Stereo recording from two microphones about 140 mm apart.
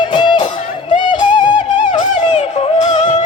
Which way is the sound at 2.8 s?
60° left (ahead or behind).